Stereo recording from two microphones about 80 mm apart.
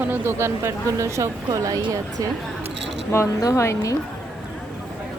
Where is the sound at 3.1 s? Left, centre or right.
Left.